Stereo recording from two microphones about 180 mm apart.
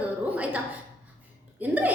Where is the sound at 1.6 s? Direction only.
10° right (ahead or behind).